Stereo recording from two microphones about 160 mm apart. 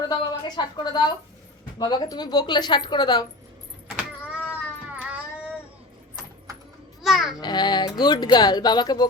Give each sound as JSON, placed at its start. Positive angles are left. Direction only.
{"t": 0.1, "sound": "speech", "side_deg": 25}
{"t": 3.8, "sound": "power windows", "side_deg": -10}
{"t": 4.9, "sound": "a sound", "side_deg": -10}
{"t": 7.0, "sound": "a child's voice", "side_deg": 0}
{"t": 7.4, "sound": "speech", "side_deg": 25}